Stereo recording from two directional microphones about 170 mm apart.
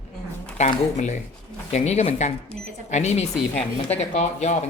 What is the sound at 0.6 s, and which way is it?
Speech, 45° left (ahead or behind).